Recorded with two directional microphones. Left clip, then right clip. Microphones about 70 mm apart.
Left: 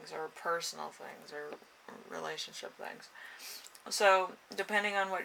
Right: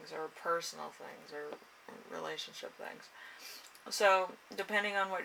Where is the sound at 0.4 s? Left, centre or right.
Left.